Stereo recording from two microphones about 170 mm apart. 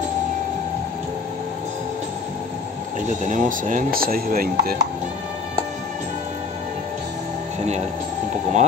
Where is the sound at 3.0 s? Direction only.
45° right (ahead or behind).